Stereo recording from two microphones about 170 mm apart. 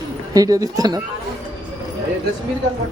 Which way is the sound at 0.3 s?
20° right (ahead or behind).